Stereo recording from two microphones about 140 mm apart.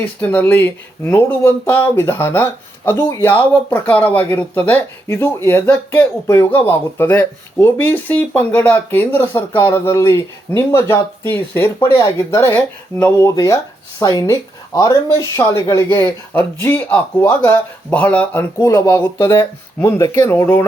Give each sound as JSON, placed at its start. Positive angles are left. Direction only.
{"t": 0.0, "sound": "speech", "side_deg": 10}